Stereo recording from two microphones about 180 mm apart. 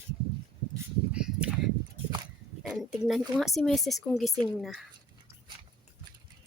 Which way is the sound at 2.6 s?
5° right (ahead or behind).